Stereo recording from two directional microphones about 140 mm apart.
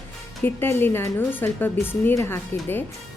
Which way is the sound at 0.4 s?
15° left (ahead or behind).